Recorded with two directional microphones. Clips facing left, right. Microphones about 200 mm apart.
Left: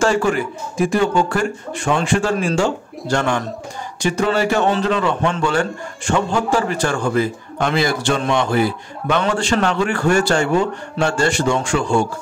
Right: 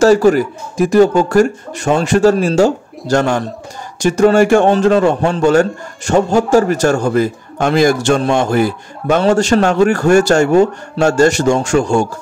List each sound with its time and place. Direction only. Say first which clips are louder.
0.0 s a man's voice: right 8 dB; 40° right (ahead or behind)